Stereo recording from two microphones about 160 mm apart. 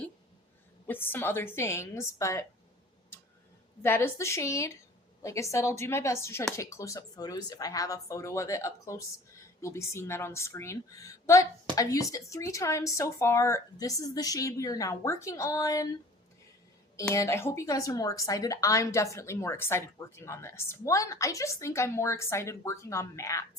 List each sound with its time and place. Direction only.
0.9 s a woman's voice: 15° left (ahead or behind)
3.8 s a woman's voice: 15° left (ahead or behind)
17.2 s a woman's voice: 15° left (ahead or behind)